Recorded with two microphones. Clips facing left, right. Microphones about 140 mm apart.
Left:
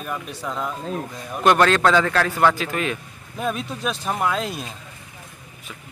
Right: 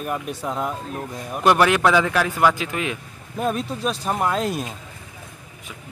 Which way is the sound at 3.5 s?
35° right (ahead or behind).